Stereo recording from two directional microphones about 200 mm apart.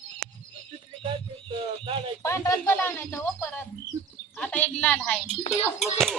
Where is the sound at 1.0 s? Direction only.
25° right (ahead or behind).